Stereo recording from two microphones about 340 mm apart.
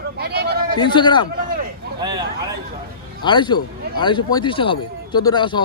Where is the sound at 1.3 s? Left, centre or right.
Right.